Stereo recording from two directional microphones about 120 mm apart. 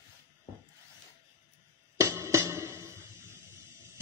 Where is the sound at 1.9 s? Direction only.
25° right (ahead or behind).